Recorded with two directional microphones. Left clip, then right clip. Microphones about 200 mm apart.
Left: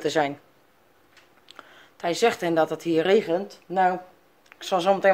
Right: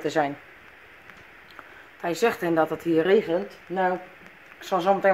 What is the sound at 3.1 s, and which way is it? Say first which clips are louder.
Speech: even; 25° left (ahead or behind).